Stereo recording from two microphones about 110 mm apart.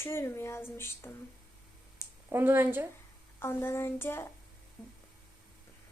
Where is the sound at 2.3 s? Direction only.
20° right (ahead or behind).